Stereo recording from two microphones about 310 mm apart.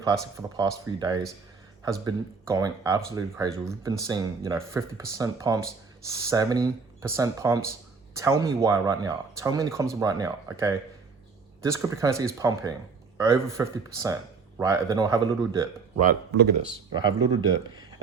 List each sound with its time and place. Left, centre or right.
0.0 s speech: centre
16.0 s speech: right
16.6 s speech: centre